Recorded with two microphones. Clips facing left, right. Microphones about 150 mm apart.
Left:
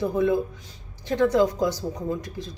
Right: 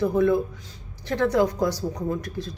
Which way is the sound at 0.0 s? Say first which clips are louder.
Right 2 dB; 20° left (ahead or behind).